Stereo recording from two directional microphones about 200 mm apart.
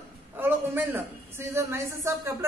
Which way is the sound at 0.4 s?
10° right (ahead or behind).